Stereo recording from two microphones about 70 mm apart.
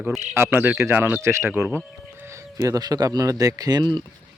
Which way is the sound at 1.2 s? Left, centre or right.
Right.